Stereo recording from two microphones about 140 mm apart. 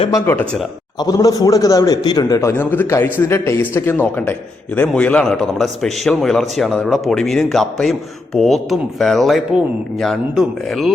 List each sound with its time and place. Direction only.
0.1 s a man's voice: 15° left (ahead or behind); by 10.9 s centre (ahead or behind)